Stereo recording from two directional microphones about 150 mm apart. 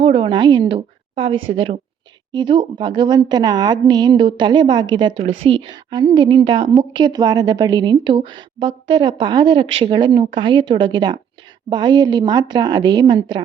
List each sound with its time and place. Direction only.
0.0 s a woman's voice: 35° right (ahead or behind)